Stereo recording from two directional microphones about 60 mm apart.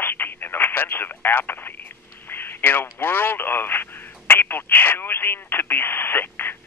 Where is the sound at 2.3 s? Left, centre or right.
Left.